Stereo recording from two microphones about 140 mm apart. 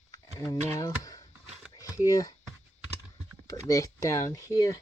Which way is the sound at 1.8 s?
25° left (ahead or behind).